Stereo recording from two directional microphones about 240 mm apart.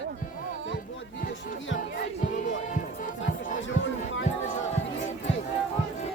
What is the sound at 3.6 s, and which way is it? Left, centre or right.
Speech, left.